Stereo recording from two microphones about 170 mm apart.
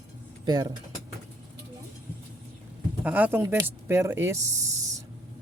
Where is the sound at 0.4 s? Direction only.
25° right (ahead or behind).